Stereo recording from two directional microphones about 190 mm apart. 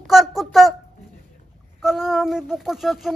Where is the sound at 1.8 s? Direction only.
Centre (ahead or behind).